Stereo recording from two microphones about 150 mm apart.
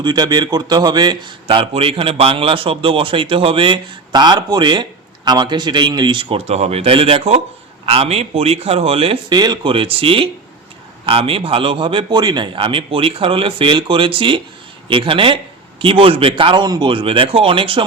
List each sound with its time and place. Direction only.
0.0 s a man's voice: 25° right (ahead or behind)